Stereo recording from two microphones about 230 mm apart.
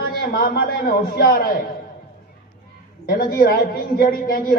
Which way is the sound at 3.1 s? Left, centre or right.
Left.